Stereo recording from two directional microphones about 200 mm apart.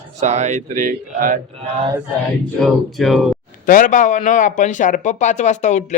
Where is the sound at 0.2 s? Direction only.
35° right (ahead or behind).